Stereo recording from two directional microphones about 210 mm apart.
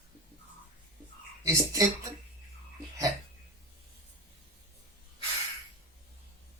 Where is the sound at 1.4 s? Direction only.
15° right (ahead or behind).